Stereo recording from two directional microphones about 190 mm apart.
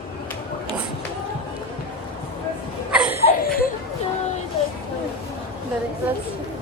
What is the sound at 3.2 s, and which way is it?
Laughter, 50° left (ahead or behind).